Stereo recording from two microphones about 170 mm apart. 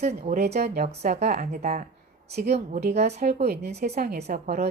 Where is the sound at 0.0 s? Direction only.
40° right (ahead or behind).